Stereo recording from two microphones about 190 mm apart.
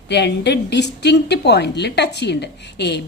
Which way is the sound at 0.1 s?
65° left (ahead or behind).